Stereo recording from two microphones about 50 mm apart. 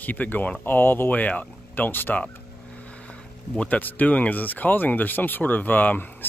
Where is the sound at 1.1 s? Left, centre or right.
Left.